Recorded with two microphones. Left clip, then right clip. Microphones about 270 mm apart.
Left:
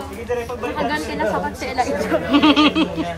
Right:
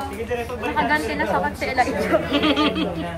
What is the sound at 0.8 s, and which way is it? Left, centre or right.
Speech, centre.